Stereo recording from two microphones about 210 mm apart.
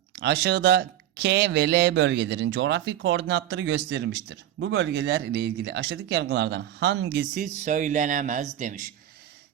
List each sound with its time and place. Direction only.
0.2 s speech: 55° right (ahead or behind)
7.1 s speech: 40° right (ahead or behind)